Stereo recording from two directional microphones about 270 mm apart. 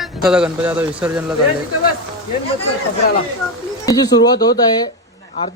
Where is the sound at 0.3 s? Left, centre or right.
Centre.